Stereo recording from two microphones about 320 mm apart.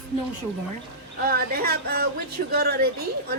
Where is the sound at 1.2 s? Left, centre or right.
Right.